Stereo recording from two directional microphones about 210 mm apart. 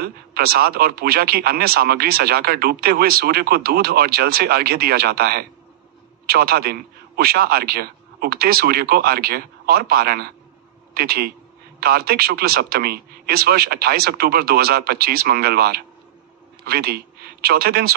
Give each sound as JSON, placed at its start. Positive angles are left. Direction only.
{"t": 0.0, "sound": "a man's voice", "side_deg": -45}